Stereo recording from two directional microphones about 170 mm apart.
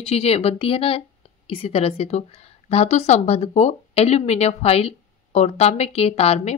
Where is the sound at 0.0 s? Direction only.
35° left (ahead or behind).